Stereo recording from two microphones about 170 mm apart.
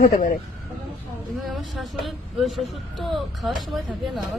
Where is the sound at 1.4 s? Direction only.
Centre (ahead or behind).